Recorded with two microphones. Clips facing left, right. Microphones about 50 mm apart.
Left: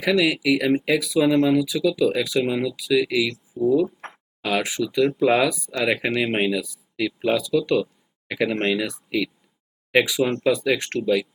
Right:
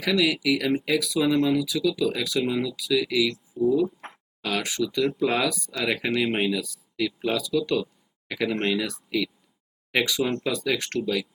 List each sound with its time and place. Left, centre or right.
0.0 s speech: centre
7.3 s speech: centre
7.6 s speech: centre